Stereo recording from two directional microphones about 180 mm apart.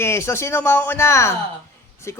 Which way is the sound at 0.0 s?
15° left (ahead or behind).